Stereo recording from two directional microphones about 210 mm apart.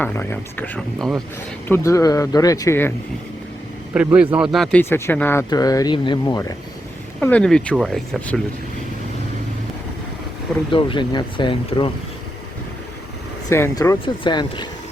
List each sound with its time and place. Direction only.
0.0 s speech: 10° left (ahead or behind)
3.9 s a man's voice: 5° right (ahead or behind)
4.5 s speech: 5° left (ahead or behind); by 6.4 s 20° left (ahead or behind)
7.2 s speech: 5° left (ahead or behind)
10.7 s speech: 25° left (ahead or behind)
13.5 s speech: 15° left (ahead or behind)